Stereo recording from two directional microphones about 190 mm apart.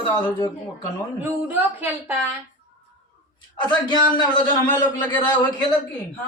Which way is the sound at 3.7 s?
25° left (ahead or behind).